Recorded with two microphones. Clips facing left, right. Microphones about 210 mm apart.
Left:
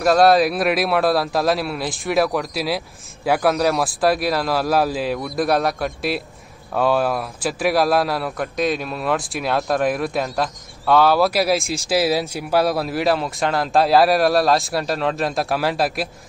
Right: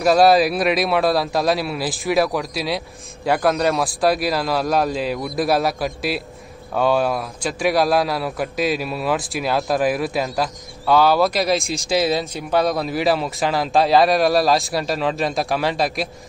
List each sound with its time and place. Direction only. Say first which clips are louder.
0.0 s a man's voice: even; centre (ahead or behind)